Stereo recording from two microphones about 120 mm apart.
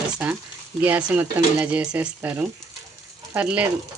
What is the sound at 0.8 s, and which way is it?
Speech, 15° right (ahead or behind).